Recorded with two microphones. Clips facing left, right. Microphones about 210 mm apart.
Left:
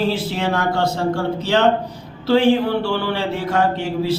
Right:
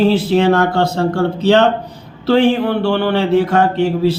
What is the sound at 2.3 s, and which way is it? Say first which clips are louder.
A man's voice: right 2 dB; 60° right (ahead or behind).